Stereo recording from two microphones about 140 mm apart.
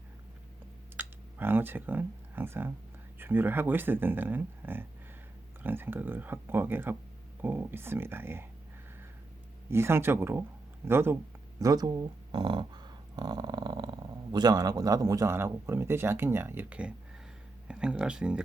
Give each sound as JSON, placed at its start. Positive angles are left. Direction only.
{"t": 0.9, "sound": "speech", "side_deg": -15}
{"t": 9.6, "sound": "speech", "side_deg": -15}
{"t": 11.6, "sound": "speech", "side_deg": -25}